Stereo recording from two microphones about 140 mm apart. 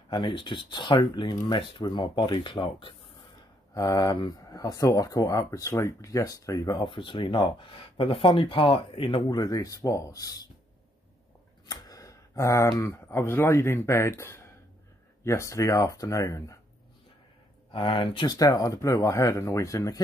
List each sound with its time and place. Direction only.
0.1 s speech: 35° left (ahead or behind)
6.8 s speech: 35° left (ahead or behind)
9.4 s speech: 25° left (ahead or behind)
11.6 s speech: 25° left (ahead or behind)
17.7 s speech: 40° left (ahead or behind)